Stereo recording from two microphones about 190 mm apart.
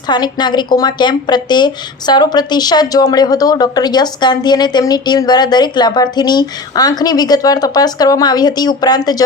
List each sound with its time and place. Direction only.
0.1 s a woman's voice: 20° left (ahead or behind)